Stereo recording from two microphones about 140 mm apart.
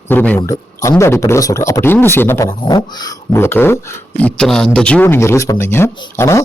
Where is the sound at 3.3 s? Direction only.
15° left (ahead or behind).